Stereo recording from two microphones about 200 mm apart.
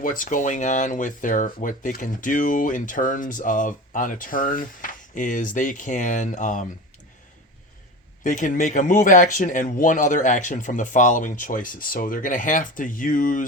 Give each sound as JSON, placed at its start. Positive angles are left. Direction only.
{"t": 0.0, "sound": "speech", "side_deg": 40}
{"t": 8.2, "sound": "speech", "side_deg": 40}